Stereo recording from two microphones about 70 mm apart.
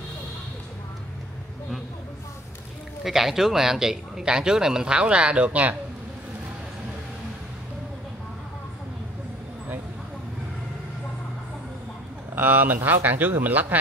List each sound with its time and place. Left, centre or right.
3.0 s speech: centre; by 5.8 s right
12.4 s speech: right